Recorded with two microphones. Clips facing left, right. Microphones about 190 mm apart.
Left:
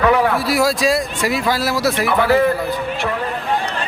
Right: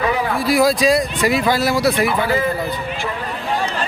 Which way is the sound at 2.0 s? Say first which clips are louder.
Left 2 dB; 65° left (ahead or behind).